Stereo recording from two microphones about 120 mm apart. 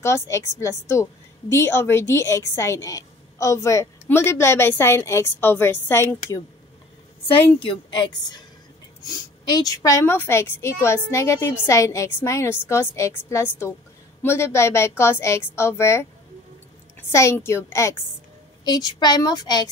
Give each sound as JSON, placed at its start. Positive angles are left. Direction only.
{"t": 0.0, "sound": "a woman's voice", "side_deg": 25}
{"t": 7.6, "sound": "a woman's voice", "side_deg": 40}
{"t": 17.1, "sound": "a woman's voice", "side_deg": 25}
{"t": 18.6, "sound": "a woman's voice", "side_deg": 35}